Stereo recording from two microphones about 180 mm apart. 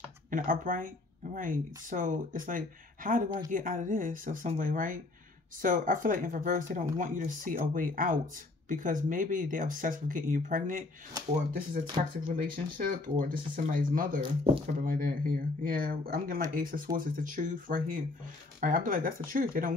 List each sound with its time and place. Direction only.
0.3 s speech: 50° right (ahead or behind)
11.8 s speech: 25° right (ahead or behind)
12.5 s speech: 50° right (ahead or behind)